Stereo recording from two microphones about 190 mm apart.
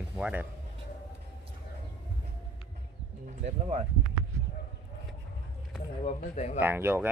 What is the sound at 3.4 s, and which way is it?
Speech, 35° right (ahead or behind).